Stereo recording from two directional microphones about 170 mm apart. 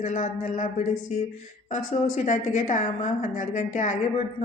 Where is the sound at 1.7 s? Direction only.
45° left (ahead or behind).